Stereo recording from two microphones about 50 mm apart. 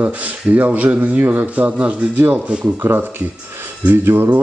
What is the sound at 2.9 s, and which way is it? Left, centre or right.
Speech, right.